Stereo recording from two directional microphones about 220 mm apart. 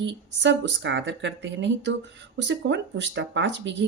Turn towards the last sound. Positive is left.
turn(degrees=-55)  # may be behind; listen again after turning